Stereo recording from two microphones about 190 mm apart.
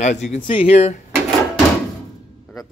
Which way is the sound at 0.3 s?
30° left (ahead or behind).